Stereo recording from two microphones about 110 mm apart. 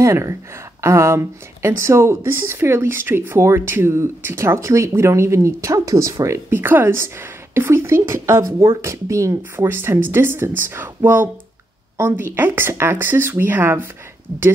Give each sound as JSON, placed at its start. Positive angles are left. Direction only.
{"t": 0.0, "sound": "speech", "side_deg": -25}